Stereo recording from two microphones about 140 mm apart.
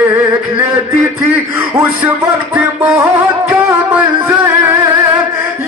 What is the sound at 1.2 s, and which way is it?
Music, 20° right (ahead or behind).